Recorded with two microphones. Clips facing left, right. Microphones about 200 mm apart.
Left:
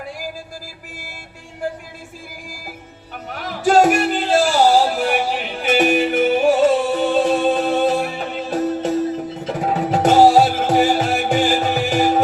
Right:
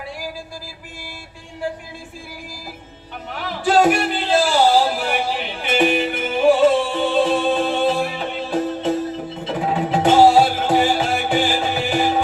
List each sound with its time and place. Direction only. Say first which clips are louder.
3.2 s music: left 3 dB; 40° left (ahead or behind)